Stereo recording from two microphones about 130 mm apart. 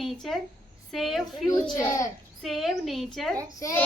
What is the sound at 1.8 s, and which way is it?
Speech, 25° left (ahead or behind).